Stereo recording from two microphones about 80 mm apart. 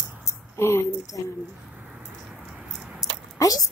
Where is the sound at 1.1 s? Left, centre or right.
Left.